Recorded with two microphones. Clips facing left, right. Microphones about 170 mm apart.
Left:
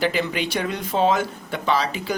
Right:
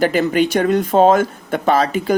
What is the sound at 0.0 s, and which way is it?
Speech, 45° right (ahead or behind).